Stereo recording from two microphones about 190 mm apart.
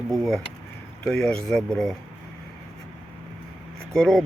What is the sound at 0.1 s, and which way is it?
Speech, centre (ahead or behind).